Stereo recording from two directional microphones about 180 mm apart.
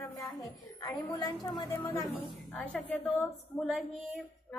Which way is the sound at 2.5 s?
Centre (ahead or behind).